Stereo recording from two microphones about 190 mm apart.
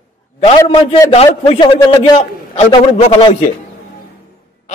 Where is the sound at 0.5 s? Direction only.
25° left (ahead or behind).